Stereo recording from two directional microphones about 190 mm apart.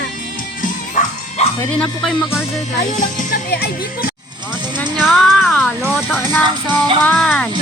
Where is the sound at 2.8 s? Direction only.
40° left (ahead or behind).